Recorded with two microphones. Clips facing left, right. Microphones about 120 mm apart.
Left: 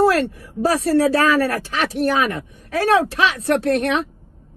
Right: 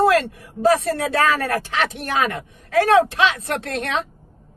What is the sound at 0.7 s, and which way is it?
Speech, 35° right (ahead or behind).